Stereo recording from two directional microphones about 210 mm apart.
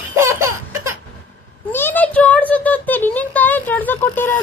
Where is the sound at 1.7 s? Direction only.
10° left (ahead or behind).